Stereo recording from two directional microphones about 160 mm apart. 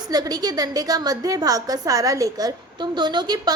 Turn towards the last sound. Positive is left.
turn(degrees=-25)  # may be behind; listen again after turning